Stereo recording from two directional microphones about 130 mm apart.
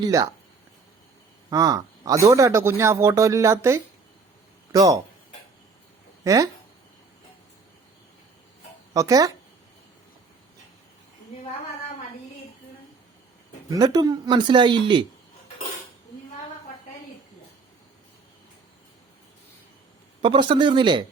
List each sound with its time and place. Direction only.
0.0 s a man's voice: 25° right (ahead or behind)
1.5 s a man's voice: 30° right (ahead or behind)
6.2 s speech: 25° right (ahead or behind)
8.9 s speech: 25° right (ahead or behind)
13.7 s speech: 30° right (ahead or behind)
20.2 s speech: 40° right (ahead or behind)